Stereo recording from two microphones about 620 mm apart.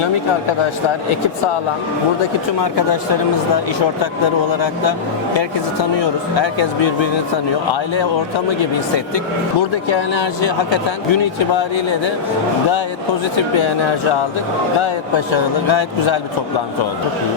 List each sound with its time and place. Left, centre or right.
6.0 s speech: left
9.9 s speech: left
13.3 s speech: left